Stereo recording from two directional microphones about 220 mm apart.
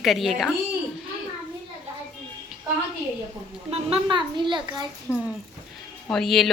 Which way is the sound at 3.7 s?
25° right (ahead or behind).